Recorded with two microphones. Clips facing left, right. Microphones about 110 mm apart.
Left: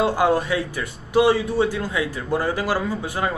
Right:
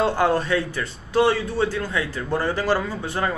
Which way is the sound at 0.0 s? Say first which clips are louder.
Left 1 dB; 10° left (ahead or behind).